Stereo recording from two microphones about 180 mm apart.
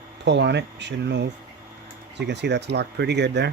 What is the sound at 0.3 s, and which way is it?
Speech, 75° right (ahead or behind).